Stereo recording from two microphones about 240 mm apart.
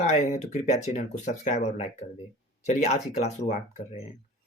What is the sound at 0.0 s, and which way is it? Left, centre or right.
Speech, left.